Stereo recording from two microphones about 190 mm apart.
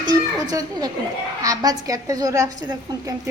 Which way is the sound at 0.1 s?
20° right (ahead or behind).